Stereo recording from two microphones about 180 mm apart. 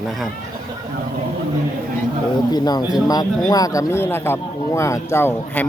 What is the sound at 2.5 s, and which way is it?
A man's voice, 20° left (ahead or behind).